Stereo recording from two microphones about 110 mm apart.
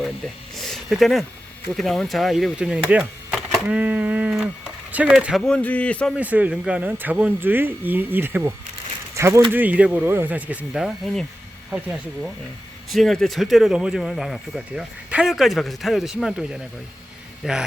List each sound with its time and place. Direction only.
0.7 s a sound: centre (ahead or behind)
1.7 s speech: centre (ahead or behind)
5.4 s speech: 5° left (ahead or behind)
6.1 s speech: 15° right (ahead or behind)
10.8 s speech: centre (ahead or behind)